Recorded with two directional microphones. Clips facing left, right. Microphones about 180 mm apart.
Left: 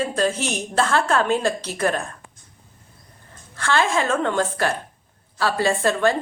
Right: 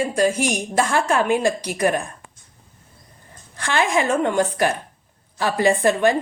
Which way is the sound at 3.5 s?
15° right (ahead or behind).